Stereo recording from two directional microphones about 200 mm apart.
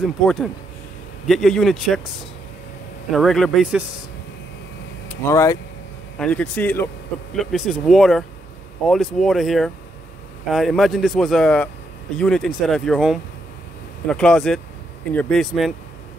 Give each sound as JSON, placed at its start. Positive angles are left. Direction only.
{"t": 0.0, "sound": "speech", "side_deg": 0}
{"t": 3.1, "sound": "speech", "side_deg": 0}
{"t": 5.0, "sound": "speech", "side_deg": 15}
{"t": 6.1, "sound": "speech", "side_deg": 5}